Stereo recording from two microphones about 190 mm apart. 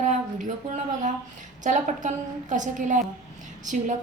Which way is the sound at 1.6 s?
40° right (ahead or behind).